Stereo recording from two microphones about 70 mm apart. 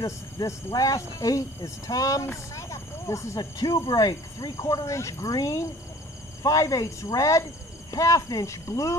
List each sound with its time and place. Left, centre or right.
0.0 s speech: left
2.3 s snake: left
3.3 s cricket: left
4.6 s speech: left